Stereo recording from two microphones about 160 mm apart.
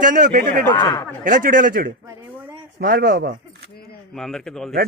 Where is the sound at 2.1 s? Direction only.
25° right (ahead or behind).